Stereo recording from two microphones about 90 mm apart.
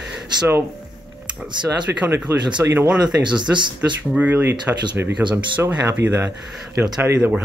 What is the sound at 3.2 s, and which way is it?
Speech, 55° right (ahead or behind).